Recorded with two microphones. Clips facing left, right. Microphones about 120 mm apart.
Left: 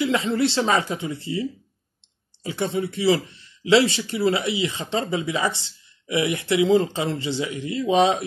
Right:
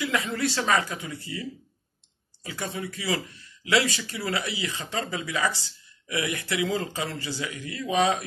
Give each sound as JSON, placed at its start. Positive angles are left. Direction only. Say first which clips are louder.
{"t": 0.0, "sound": "speech", "louder": "left 6 dB", "side_deg": 25}